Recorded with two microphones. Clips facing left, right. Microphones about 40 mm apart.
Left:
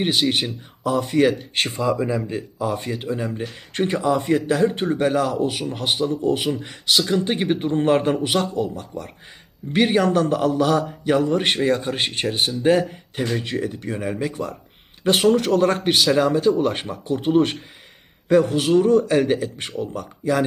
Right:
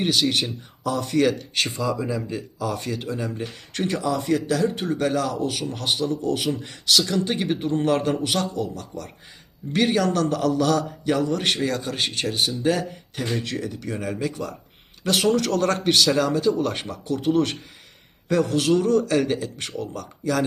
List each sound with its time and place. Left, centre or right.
0.0 s a man's voice: left
1.5 s a man's voice: left